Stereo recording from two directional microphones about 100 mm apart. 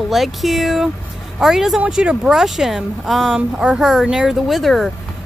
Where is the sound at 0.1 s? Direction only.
Centre (ahead or behind).